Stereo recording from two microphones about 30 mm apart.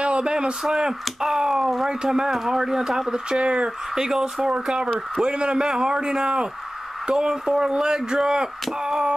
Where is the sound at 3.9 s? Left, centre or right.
Centre.